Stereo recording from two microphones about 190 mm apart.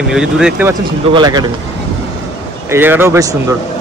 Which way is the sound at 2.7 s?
10° right (ahead or behind).